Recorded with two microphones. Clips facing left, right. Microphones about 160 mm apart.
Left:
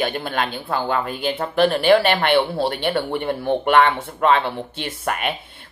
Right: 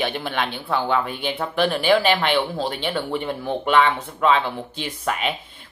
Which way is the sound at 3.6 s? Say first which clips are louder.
Left 1 dB; 55° left (ahead or behind).